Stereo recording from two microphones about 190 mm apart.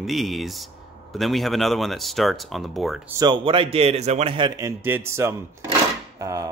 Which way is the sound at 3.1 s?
25° right (ahead or behind).